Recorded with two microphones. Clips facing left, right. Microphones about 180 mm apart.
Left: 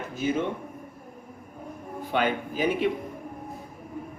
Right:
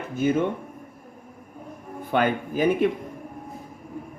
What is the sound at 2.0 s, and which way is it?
Speech, 50° right (ahead or behind).